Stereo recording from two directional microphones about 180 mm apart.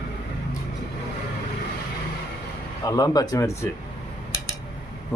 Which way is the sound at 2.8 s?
20° left (ahead or behind).